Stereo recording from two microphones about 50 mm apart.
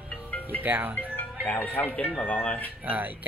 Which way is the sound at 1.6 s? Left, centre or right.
Left.